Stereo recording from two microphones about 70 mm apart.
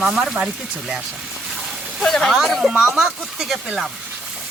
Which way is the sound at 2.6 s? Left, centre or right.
Centre.